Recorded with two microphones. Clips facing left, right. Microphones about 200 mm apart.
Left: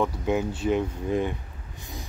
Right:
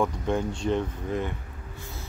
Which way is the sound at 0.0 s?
5° left (ahead or behind).